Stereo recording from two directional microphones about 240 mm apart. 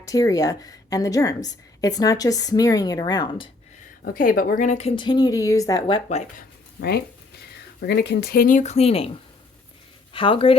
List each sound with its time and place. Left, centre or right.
0.0 s a woman's voice: centre
4.0 s a woman's voice: left; by 6.0 s centre
6.1 s a woman's voice: left
6.7 s speech: left
10.1 s speech: left